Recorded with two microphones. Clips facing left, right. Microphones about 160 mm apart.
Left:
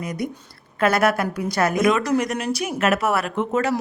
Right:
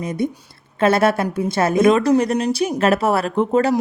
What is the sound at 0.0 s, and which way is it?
A woman's voice, 25° right (ahead or behind).